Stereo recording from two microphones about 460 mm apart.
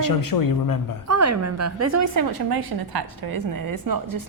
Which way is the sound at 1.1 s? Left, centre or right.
Right.